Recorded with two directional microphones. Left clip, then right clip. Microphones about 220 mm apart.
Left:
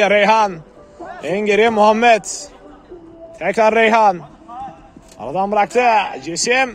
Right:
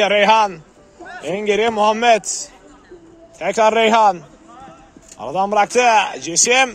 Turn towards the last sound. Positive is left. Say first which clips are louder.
# right 2 dB
turn(degrees=-20)  # may be behind; listen again after turning